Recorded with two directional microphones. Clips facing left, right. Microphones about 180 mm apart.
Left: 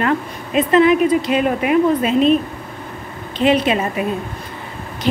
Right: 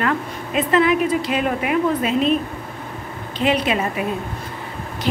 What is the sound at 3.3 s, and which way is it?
Speech, 25° left (ahead or behind).